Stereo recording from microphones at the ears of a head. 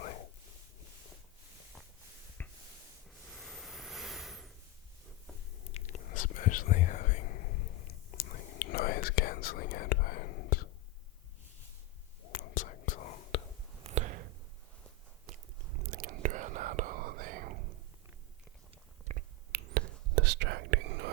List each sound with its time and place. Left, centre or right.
3.3 s a sound: centre
5.6 s whispering: left
12.2 s whispering: left
13.8 s a sound: right
15.3 s whispering: right
19.0 s whispering: right